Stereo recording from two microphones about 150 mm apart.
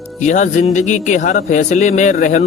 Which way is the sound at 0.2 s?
55° left (ahead or behind).